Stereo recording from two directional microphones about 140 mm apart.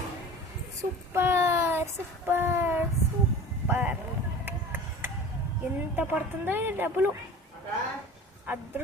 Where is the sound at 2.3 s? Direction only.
15° right (ahead or behind).